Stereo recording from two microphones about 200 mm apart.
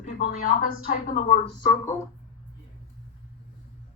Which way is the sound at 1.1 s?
35° left (ahead or behind).